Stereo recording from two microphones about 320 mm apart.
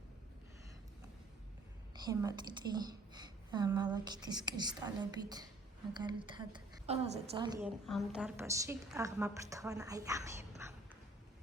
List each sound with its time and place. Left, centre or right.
2.0 s a woman's voice: centre
7.9 s a woman's voice: centre
10.6 s a sound: centre